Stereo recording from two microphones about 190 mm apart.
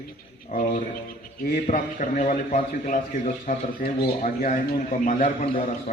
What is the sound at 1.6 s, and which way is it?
A man's voice, 40° left (ahead or behind).